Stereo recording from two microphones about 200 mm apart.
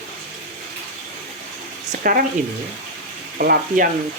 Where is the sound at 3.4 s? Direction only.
45° right (ahead or behind).